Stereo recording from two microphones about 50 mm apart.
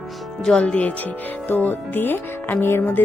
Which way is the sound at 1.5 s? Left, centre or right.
Left.